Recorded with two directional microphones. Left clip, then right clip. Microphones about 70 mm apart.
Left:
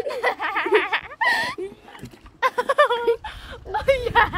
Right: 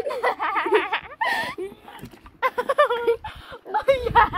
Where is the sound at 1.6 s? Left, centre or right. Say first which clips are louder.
Left 1 dB; left.